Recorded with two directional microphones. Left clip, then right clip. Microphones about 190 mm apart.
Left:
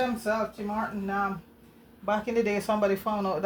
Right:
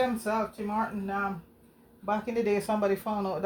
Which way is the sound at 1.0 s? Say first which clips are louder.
Left 2 dB; 30° left (ahead or behind).